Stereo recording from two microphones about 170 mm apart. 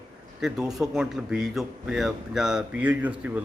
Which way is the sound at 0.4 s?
5° right (ahead or behind).